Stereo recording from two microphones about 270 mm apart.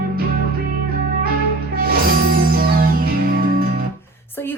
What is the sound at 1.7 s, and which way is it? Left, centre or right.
Music, right.